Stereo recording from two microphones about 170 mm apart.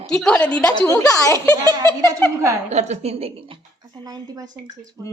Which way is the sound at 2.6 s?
40° right (ahead or behind).